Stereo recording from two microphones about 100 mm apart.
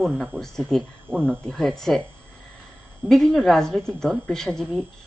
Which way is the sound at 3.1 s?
5° left (ahead or behind).